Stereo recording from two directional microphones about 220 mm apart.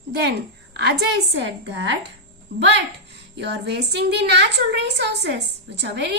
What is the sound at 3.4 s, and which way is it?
A woman's voice, 50° right (ahead or behind).